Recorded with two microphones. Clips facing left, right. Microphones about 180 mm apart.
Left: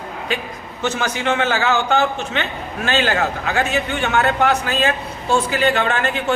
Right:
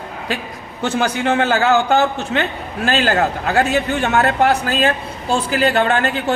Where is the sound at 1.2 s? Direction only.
35° right (ahead or behind).